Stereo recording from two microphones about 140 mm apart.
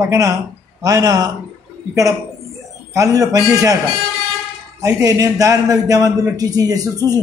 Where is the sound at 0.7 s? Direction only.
25° right (ahead or behind).